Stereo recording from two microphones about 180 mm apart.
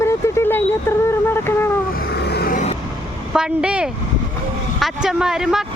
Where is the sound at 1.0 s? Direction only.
15° left (ahead or behind).